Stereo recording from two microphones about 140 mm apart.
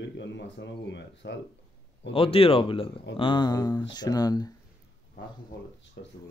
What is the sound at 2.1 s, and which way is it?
Speech, 40° left (ahead or behind).